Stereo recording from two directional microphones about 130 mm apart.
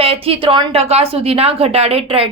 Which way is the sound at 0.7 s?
50° right (ahead or behind).